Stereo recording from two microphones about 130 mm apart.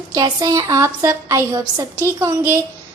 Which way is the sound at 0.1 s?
25° right (ahead or behind).